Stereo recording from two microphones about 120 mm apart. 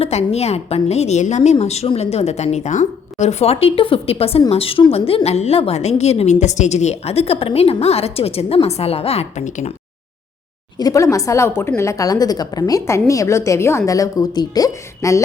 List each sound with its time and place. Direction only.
0.0 s a woman's voice: 60° left (ahead or behind); by 9.7 s 90° left
10.8 s a woman's voice: 30° left (ahead or behind)